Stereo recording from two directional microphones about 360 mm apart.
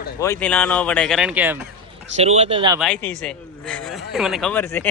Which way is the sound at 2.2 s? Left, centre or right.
Centre.